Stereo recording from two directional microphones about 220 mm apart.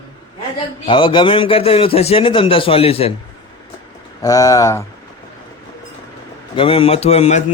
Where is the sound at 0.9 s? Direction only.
20° left (ahead or behind).